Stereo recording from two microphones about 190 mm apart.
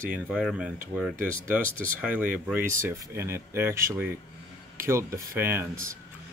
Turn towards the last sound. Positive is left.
turn(degrees=-15)  # may be behind; listen again after turning